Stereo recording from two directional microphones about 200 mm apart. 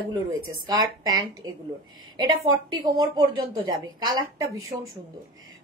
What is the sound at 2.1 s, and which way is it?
A woman's voice, 20° right (ahead or behind).